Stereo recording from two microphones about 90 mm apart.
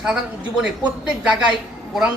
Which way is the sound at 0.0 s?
10° right (ahead or behind).